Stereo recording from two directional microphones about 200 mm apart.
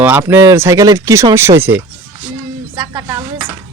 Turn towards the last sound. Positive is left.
turn(degrees=-15)  # may be behind; listen again after turning